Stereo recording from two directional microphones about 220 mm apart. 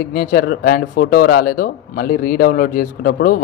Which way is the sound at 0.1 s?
40° left (ahead or behind).